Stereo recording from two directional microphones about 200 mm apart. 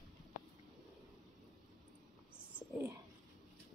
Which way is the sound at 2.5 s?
10° right (ahead or behind).